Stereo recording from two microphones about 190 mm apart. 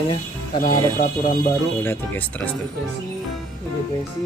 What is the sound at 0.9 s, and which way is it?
Speech, 45° left (ahead or behind).